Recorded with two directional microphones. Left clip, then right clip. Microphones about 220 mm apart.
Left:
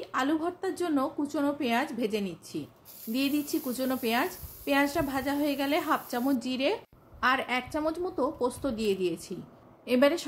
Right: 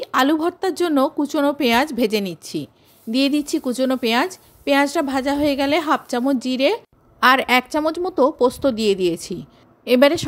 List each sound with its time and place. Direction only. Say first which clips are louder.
0.0 s a woman's voice: right 11 dB; 45° right (ahead or behind)